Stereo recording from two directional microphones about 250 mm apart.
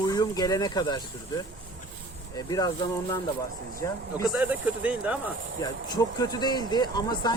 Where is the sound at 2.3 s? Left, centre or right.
Centre.